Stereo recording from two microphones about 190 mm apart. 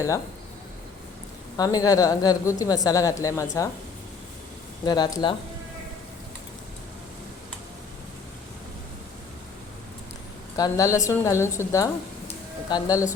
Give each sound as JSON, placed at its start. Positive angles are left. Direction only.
{"t": 1.5, "sound": "speech", "side_deg": 20}
{"t": 4.9, "sound": "speech", "side_deg": 20}
{"t": 10.6, "sound": "speech", "side_deg": 15}